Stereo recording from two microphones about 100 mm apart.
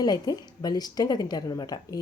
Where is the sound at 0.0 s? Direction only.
40° left (ahead or behind).